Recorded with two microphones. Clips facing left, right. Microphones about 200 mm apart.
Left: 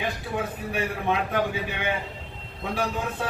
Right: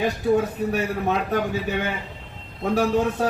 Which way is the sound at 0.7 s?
40° right (ahead or behind).